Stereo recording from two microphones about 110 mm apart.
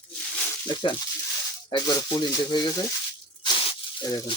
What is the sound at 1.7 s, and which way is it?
Speech, 35° left (ahead or behind).